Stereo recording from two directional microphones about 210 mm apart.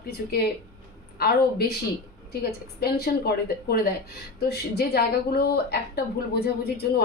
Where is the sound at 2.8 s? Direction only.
50° left (ahead or behind).